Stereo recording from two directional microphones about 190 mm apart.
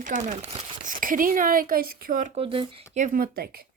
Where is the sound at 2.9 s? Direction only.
45° right (ahead or behind).